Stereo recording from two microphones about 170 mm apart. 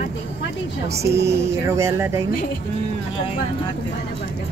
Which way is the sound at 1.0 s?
15° right (ahead or behind).